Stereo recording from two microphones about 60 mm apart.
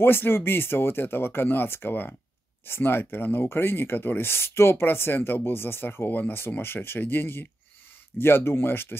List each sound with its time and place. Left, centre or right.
0.0 s speech: left